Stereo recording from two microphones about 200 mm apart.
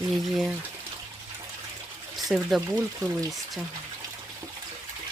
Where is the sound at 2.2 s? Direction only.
Centre (ahead or behind).